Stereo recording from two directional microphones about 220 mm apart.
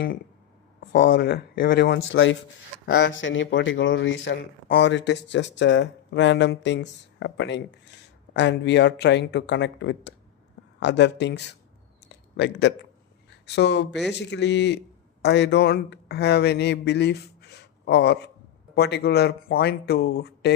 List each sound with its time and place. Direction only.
1.1 s a man's voice: 40° left (ahead or behind)
12.0 s a sound: 50° left (ahead or behind)
13.6 s a man's voice: 50° left (ahead or behind)